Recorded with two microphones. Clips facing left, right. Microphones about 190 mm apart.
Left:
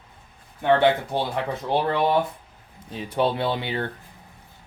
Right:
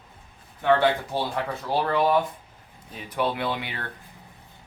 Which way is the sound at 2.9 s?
30° left (ahead or behind).